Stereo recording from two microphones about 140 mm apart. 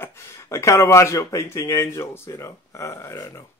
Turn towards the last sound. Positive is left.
turn(degrees=20)  # may be behind; listen again after turning